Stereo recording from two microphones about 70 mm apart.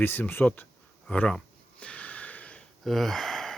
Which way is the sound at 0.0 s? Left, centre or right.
Left.